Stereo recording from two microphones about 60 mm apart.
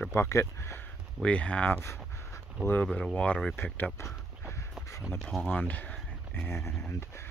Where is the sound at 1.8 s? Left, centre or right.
Left.